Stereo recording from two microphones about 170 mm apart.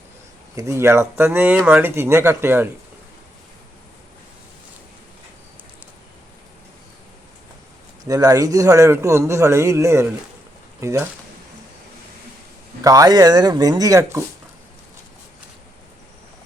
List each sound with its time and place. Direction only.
0.5 s speech: 15° right (ahead or behind)
8.0 s speech: 20° right (ahead or behind)
12.8 s speech: 20° right (ahead or behind)